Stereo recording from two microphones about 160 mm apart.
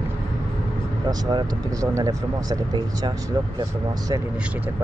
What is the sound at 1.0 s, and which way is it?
Speech, 25° right (ahead or behind).